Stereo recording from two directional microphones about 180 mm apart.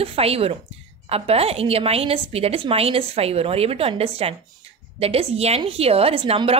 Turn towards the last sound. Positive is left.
turn(degrees=-30)  # may be behind; listen again after turning